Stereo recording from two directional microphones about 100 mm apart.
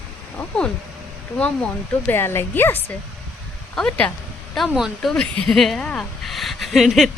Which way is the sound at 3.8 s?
10° left (ahead or behind).